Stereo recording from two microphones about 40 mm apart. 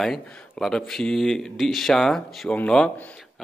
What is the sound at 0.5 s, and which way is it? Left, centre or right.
Speech, centre.